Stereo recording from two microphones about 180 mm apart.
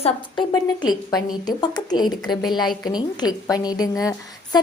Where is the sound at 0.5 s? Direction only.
20° left (ahead or behind).